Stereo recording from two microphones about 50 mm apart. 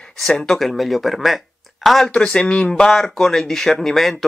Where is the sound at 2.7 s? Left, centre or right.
Centre.